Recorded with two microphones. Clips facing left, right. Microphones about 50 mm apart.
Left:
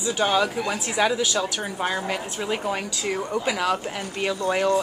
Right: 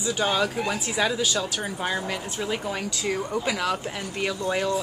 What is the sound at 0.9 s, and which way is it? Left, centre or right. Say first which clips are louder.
Speech: left 3 dB; centre.